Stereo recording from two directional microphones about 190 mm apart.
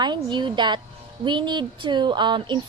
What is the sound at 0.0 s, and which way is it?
Speech, 25° right (ahead or behind).